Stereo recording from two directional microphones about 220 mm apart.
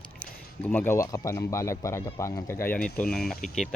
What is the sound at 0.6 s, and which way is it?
Speech, 10° left (ahead or behind).